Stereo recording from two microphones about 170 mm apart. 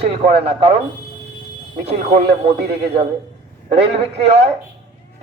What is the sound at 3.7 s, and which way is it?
Speech, 40° right (ahead or behind).